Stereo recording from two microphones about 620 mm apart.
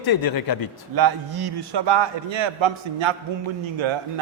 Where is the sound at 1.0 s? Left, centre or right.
Right.